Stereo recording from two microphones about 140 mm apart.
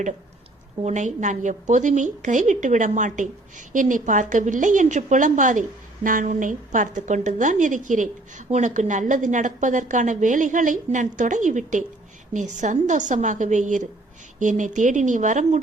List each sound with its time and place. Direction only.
0.8 s a woman's voice: 55° right (ahead or behind)